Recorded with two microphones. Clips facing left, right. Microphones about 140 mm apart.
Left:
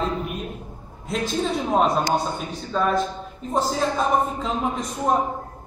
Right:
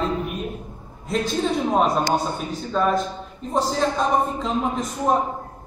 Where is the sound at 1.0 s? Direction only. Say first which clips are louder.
Right 2 dB; centre (ahead or behind).